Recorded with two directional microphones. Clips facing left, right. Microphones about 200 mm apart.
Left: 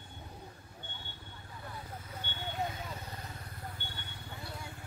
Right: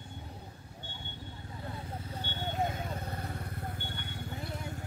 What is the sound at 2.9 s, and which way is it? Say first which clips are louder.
Vehicle: right 6 dB; 55° right (ahead or behind).